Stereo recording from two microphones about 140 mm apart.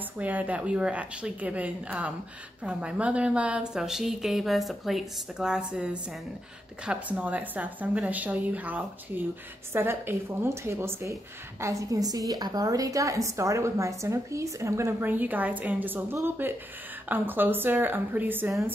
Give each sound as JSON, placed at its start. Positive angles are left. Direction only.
{"t": 0.2, "sound": "a woman's voice", "side_deg": -10}
{"t": 6.9, "sound": "a woman's voice", "side_deg": -10}